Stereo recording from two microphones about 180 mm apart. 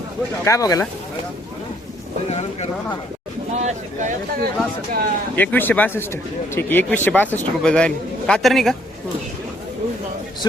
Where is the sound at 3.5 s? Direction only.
40° right (ahead or behind).